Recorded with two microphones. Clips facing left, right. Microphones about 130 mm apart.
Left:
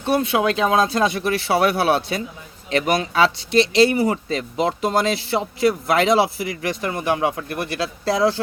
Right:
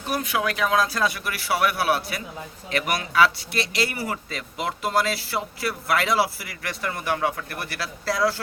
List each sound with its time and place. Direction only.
0.0 s speech: 25° left (ahead or behind)